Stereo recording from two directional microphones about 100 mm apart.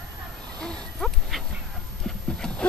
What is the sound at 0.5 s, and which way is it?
Dog, 10° left (ahead or behind).